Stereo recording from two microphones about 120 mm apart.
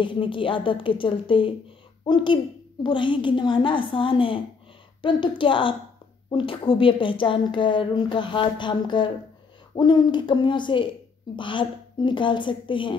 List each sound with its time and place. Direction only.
0.0 s a woman's voice: 45° left (ahead or behind)